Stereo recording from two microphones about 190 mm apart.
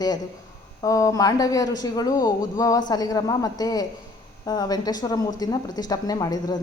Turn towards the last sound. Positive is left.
turn(degrees=20)  # may be behind; listen again after turning